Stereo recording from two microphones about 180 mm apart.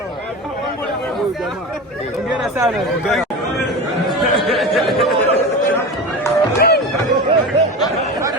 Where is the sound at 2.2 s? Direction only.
Centre (ahead or behind).